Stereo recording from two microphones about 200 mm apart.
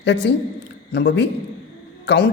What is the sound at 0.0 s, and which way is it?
A woman's voice, 60° left (ahead or behind).